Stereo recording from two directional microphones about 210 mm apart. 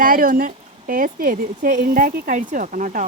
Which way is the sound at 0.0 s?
40° right (ahead or behind).